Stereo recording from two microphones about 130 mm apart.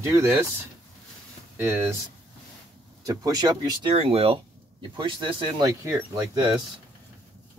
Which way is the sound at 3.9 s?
50° right (ahead or behind).